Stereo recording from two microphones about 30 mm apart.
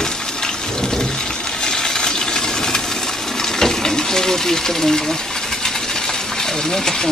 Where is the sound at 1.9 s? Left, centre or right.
Left.